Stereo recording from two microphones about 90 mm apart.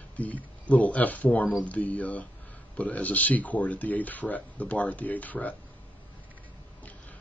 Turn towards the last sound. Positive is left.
turn(degrees=15)  # may be behind; listen again after turning